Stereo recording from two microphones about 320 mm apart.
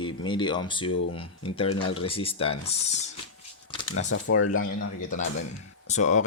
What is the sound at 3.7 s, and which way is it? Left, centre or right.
Shuffling cards, left.